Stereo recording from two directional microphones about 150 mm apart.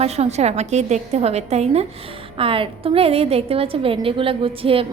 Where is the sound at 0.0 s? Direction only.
45° right (ahead or behind).